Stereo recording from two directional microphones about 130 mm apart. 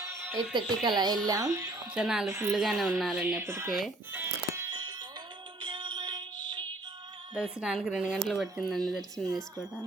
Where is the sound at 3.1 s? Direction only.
10° right (ahead or behind).